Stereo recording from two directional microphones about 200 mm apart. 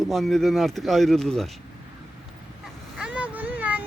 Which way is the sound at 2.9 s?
5° right (ahead or behind).